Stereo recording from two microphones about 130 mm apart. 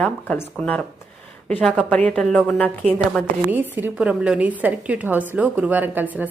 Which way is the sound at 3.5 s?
15° right (ahead or behind).